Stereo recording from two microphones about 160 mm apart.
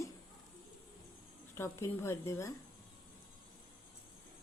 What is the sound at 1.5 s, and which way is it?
A woman's voice, 15° left (ahead or behind).